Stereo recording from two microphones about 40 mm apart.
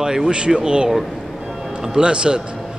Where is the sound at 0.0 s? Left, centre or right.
Centre.